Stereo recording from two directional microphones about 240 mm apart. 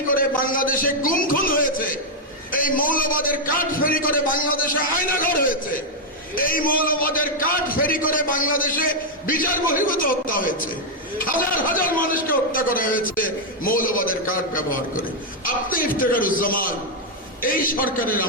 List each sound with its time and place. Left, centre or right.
0.1 s a man's voice: left
16.0 s a man's voice: left